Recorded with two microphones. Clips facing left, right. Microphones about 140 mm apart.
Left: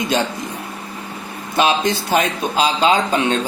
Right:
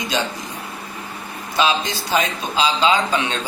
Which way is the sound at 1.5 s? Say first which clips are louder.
Left 3 dB; 55° left (ahead or behind).